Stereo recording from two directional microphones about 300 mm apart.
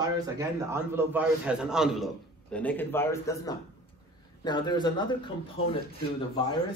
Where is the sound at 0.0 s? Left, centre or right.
Centre.